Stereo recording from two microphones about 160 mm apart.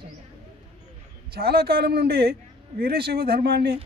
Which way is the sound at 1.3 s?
80° right.